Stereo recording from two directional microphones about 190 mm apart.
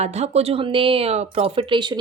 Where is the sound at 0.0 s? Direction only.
35° right (ahead or behind).